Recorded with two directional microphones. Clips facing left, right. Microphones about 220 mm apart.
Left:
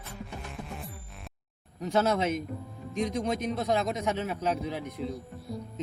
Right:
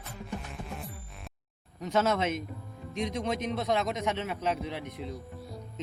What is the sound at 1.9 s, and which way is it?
Speech, 35° left (ahead or behind).